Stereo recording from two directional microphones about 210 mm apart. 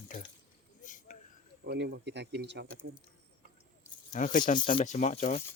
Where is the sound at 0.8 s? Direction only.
40° left (ahead or behind).